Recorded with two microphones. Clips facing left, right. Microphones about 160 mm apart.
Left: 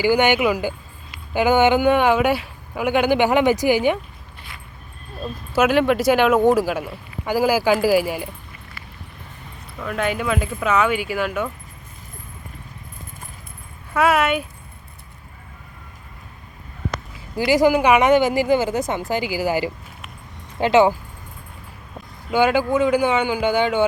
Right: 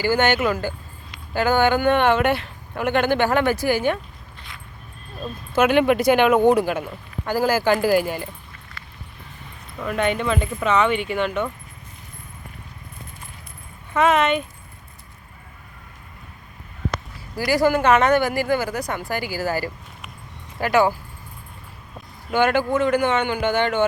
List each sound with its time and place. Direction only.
0.0 s speech: 15° left (ahead or behind)
5.2 s speech: 5° left (ahead or behind)
9.8 s speech: centre (ahead or behind)
13.9 s speech: 5° left (ahead or behind)
17.3 s speech: 20° left (ahead or behind)
22.3 s speech: 10° left (ahead or behind)